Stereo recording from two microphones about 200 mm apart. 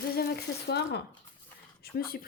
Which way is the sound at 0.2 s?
55° left (ahead or behind).